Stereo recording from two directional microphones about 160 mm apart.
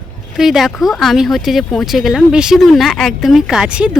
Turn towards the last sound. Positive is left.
turn(degrees=-5)  # may be behind; listen again after turning